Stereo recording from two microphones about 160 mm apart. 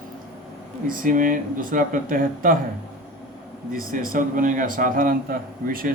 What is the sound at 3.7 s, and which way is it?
A man's voice, 60° right (ahead or behind).